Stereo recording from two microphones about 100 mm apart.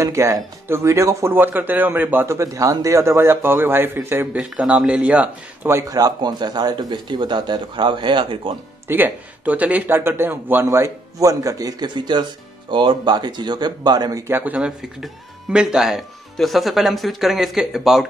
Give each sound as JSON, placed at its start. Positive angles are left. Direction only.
{"t": 0.0, "sound": "speech", "side_deg": -30}
{"t": 4.4, "sound": "speech", "side_deg": -10}
{"t": 5.7, "sound": "speech", "side_deg": -30}
{"t": 8.8, "sound": "speech", "side_deg": -20}
{"t": 14.2, "sound": "speech", "side_deg": -20}